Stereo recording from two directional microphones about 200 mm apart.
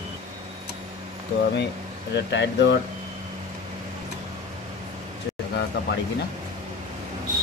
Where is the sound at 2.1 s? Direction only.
60° left (ahead or behind).